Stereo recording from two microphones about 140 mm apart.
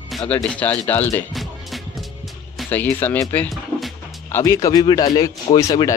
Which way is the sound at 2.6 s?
15° left (ahead or behind).